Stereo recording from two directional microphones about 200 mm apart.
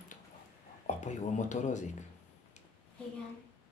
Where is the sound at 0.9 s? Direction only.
35° left (ahead or behind).